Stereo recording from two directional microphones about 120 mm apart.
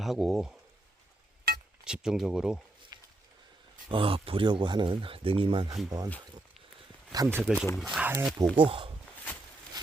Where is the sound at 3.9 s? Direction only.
50° right (ahead or behind).